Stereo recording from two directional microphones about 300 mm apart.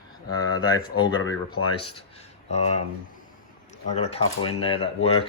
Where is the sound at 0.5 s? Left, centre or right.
Left.